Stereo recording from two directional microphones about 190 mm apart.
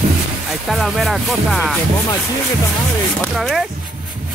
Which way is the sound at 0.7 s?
Centre (ahead or behind).